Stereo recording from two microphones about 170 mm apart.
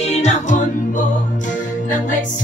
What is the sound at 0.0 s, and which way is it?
Music, 40° left (ahead or behind).